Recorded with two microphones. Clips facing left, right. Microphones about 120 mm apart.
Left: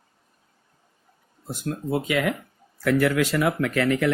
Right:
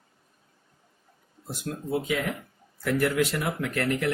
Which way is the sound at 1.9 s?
85° left.